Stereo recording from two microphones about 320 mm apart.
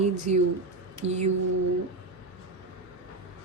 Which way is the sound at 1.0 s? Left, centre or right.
Right.